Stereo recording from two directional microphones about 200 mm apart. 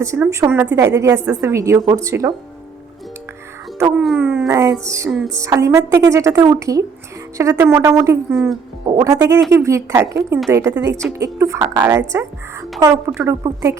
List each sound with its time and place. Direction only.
0.0 s a woman's voice: 15° right (ahead or behind)
3.9 s a woman's voice: 5° right (ahead or behind)